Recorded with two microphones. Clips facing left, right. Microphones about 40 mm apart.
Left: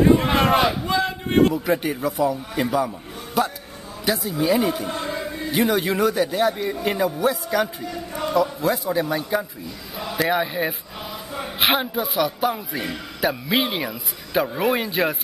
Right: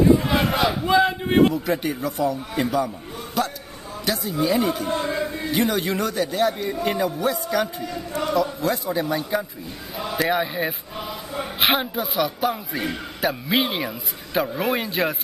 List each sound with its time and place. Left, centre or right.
0.0 s battle cry: left
0.8 s battle cry: centre
1.5 s speech: centre
4.8 s speech: right
5.5 s a man's voice: centre